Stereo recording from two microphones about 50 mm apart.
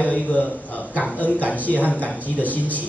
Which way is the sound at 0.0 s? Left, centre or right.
Left.